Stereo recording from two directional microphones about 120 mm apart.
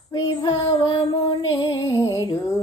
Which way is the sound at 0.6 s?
35° left (ahead or behind).